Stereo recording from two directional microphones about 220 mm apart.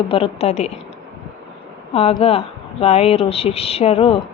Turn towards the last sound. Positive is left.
turn(degrees=25)  # may be behind; listen again after turning